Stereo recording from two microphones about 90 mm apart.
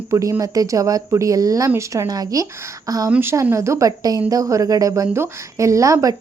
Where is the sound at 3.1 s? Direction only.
20° right (ahead or behind).